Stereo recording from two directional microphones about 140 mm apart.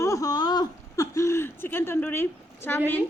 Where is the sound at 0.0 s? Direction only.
25° left (ahead or behind).